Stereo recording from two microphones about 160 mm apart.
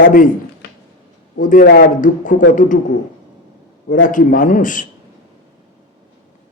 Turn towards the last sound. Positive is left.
turn(degrees=55)  # may be behind; listen again after turning